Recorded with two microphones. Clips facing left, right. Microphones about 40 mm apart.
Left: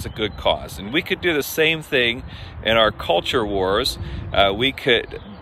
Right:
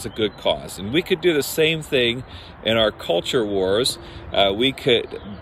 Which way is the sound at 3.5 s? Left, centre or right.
Left.